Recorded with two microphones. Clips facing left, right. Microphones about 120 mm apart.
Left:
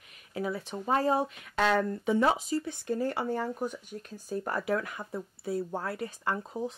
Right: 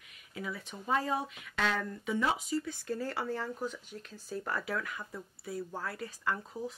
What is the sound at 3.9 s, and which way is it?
Speech, 40° left (ahead or behind).